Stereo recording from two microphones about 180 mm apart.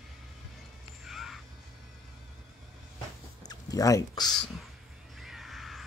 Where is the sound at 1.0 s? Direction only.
Centre (ahead or behind).